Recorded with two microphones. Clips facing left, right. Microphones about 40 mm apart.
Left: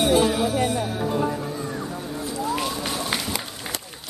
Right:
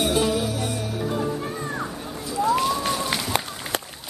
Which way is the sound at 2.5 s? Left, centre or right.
Centre.